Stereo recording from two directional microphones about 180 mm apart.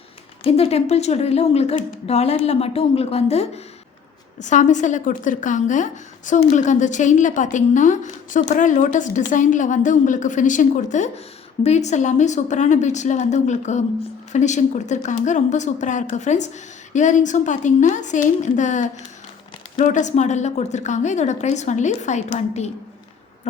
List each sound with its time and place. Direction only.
0.4 s a woman's voice: 35° left (ahead or behind)